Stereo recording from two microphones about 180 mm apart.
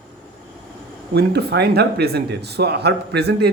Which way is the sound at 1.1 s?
65° right (ahead or behind).